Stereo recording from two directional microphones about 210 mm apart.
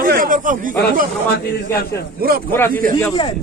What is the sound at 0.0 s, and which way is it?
Speech, 40° right (ahead or behind).